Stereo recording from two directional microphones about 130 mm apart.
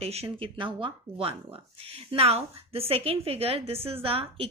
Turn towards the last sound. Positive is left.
turn(degrees=-45)  # may be behind; listen again after turning